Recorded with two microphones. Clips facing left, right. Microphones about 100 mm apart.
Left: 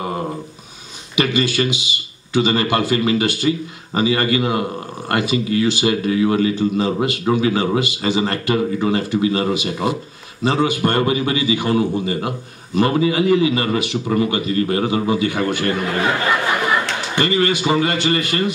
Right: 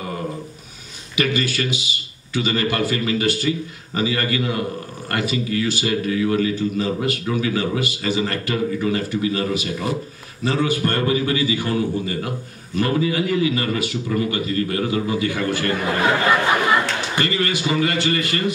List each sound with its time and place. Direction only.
1.1 s a man's voice: 20° left (ahead or behind)
17.1 s a man's voice: 20° left (ahead or behind)